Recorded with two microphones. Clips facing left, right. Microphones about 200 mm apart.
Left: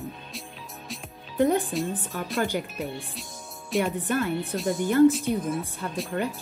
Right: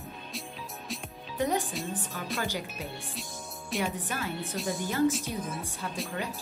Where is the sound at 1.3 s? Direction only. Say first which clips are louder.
Left 7 dB; 55° left (ahead or behind).